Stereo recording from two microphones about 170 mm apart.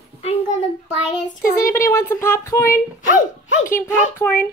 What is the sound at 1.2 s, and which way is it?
Child singing, 50° left (ahead or behind).